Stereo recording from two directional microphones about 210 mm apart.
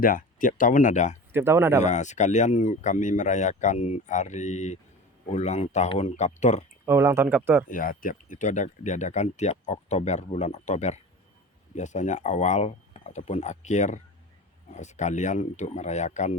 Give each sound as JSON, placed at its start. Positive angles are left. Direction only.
{"t": 0.0, "sound": "speech", "side_deg": 40}
{"t": 1.3, "sound": "speech", "side_deg": -10}
{"t": 1.8, "sound": "speech", "side_deg": 35}
{"t": 6.8, "sound": "speech", "side_deg": -10}
{"t": 7.7, "sound": "speech", "side_deg": 40}